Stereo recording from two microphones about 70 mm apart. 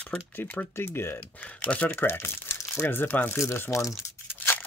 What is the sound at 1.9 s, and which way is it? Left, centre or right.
Speech, left.